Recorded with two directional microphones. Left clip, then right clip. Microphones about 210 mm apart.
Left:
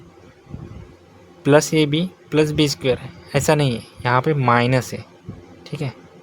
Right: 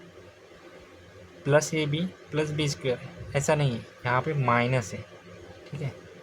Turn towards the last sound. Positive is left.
turn(degrees=45)  # may be behind; listen again after turning